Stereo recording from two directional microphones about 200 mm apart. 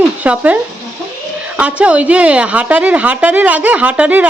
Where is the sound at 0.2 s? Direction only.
5° right (ahead or behind).